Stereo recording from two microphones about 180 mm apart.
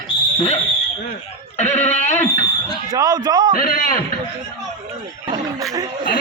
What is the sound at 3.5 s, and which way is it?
Speech, 55° left (ahead or behind).